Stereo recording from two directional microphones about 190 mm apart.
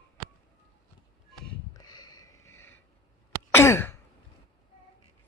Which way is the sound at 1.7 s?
20° left (ahead or behind).